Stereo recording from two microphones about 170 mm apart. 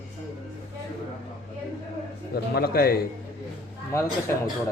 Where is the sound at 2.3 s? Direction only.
65° left (ahead or behind).